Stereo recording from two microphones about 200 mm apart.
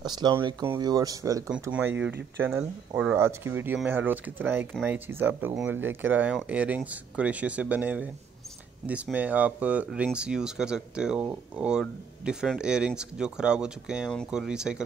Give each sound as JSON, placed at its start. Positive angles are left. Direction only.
{"t": 0.0, "sound": "speech", "side_deg": -20}